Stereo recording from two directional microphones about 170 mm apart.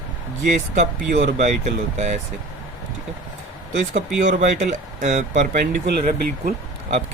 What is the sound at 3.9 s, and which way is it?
Speech, 45° right (ahead or behind).